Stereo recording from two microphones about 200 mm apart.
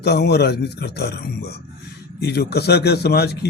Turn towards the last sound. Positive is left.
turn(degrees=55)  # may be behind; listen again after turning